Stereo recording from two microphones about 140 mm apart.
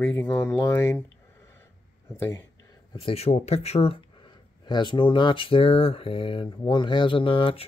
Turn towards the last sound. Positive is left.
turn(degrees=40)  # may be behind; listen again after turning